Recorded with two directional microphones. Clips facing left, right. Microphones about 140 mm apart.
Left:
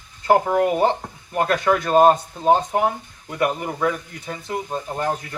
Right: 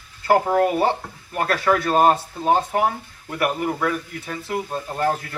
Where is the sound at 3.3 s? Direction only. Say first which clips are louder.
Even; 20° left (ahead or behind).